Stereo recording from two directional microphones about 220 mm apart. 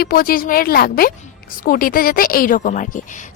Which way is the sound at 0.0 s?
40° left (ahead or behind).